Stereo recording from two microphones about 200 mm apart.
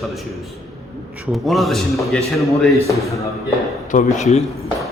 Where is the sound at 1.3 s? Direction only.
Centre (ahead or behind).